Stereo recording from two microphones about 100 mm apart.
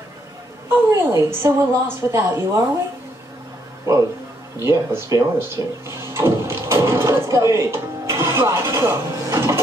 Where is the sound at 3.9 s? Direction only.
25° right (ahead or behind).